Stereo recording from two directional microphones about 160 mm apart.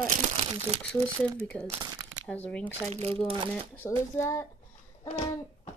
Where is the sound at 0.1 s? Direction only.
45° right (ahead or behind).